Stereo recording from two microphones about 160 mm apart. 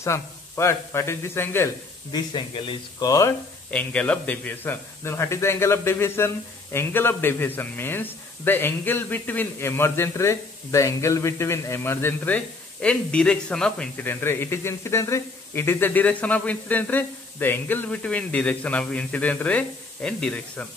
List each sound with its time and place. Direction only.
0.0 s a man's voice: 15° left (ahead or behind)
2.1 s speech: 30° left (ahead or behind)
3.7 s a man's voice: 10° left (ahead or behind)